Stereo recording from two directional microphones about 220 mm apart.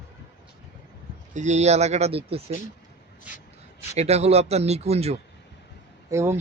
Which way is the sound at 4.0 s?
30° right (ahead or behind).